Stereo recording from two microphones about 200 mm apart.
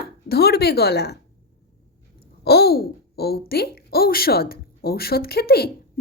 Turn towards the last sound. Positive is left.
turn(degrees=50)  # may be behind; listen again after turning